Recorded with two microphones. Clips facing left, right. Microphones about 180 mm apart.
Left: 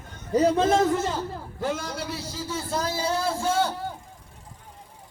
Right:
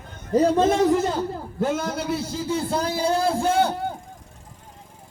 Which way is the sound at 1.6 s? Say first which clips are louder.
Right 5 dB; 50° right (ahead or behind).